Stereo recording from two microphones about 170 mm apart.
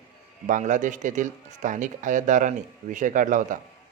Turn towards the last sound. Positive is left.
turn(degrees=-50)  # may be behind; listen again after turning